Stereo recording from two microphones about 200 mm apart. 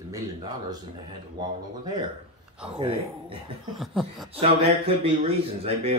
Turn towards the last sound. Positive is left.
turn(degrees=-30)  # may be behind; listen again after turning